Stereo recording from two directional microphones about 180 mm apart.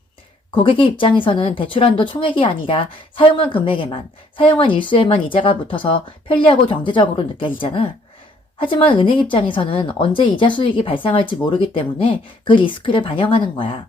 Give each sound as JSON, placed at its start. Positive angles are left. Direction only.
{"t": 0.5, "sound": "speech", "side_deg": 30}